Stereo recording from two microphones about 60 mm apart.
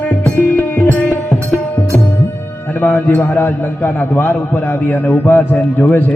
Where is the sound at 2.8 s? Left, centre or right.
Left.